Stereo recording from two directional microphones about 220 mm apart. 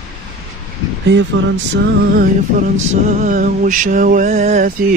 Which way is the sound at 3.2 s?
35° right (ahead or behind).